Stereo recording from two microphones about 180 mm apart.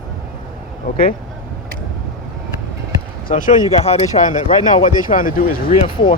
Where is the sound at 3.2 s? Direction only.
50° left (ahead or behind).